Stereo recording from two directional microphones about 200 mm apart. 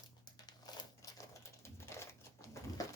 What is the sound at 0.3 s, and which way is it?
Typewriter, 20° left (ahead or behind).